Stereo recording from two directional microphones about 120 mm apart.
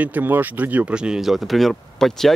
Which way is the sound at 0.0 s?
15° right (ahead or behind).